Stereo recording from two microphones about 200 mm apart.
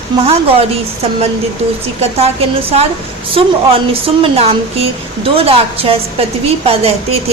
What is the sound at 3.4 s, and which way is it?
A woman's voice, 30° right (ahead or behind).